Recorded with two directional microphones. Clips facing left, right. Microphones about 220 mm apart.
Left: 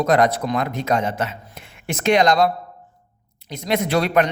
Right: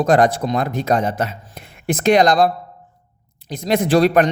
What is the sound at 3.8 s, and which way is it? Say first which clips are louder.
Speech: right 5 dB; 35° right (ahead or behind).